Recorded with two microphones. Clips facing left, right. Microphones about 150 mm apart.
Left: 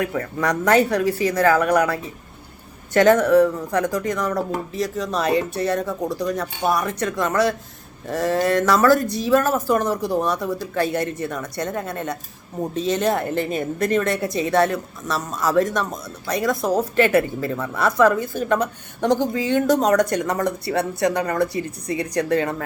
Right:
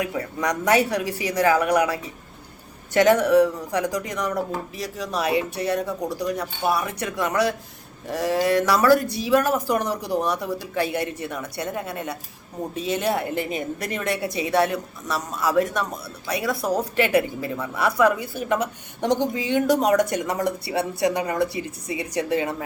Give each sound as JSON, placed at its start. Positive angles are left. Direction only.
{"t": 0.0, "sound": "a woman's voice", "side_deg": -15}
{"t": 9.0, "sound": "speech", "side_deg": 45}
{"t": 9.2, "sound": "a woman's voice", "side_deg": -15}